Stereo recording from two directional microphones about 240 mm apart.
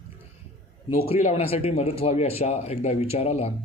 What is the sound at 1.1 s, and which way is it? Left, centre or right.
Speech, left.